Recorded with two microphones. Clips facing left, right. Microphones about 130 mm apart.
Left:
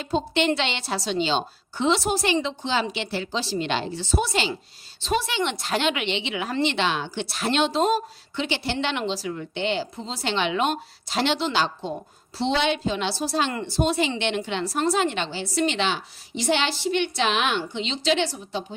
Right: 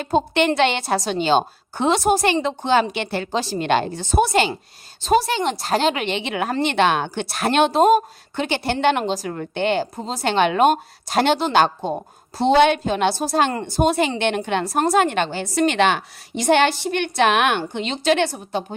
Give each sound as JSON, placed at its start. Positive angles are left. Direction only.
{"t": 0.0, "sound": "speech", "side_deg": -50}